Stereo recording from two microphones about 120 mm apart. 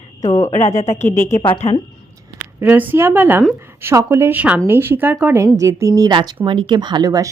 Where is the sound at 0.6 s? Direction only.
25° left (ahead or behind).